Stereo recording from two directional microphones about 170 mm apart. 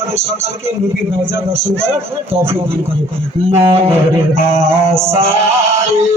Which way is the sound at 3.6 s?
35° right (ahead or behind).